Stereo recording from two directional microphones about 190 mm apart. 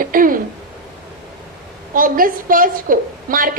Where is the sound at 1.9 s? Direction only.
45° right (ahead or behind).